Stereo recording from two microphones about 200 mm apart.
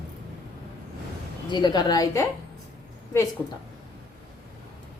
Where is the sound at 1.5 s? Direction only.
20° left (ahead or behind).